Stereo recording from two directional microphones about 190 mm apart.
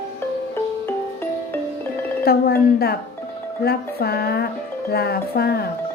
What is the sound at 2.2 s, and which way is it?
Speech, 55° left (ahead or behind).